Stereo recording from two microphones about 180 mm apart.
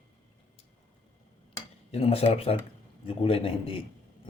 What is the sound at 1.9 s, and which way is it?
A man's voice, 35° left (ahead or behind).